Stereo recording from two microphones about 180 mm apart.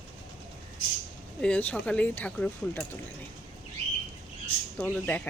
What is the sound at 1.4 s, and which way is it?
Speech, 10° left (ahead or behind).